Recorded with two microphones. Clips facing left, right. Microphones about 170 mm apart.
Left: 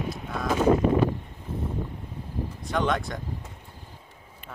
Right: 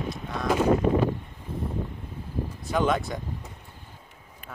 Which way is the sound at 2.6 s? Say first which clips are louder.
Right 2 dB; 5° right (ahead or behind).